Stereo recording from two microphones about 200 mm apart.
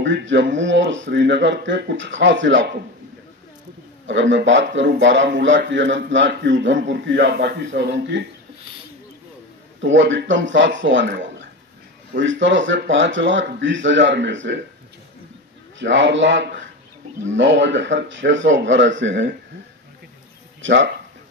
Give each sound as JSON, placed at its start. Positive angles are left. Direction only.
{"t": 0.0, "sound": "speech", "side_deg": -65}
{"t": 4.0, "sound": "speech", "side_deg": -65}
{"t": 9.8, "sound": "speech", "side_deg": -65}
{"t": 15.8, "sound": "speech", "side_deg": -65}
{"t": 20.6, "sound": "speech", "side_deg": -65}